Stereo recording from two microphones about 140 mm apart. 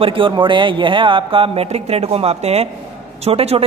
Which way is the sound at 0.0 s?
40° right (ahead or behind).